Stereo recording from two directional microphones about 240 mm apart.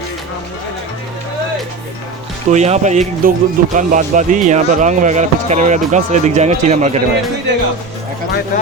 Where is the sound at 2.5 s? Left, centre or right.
Right.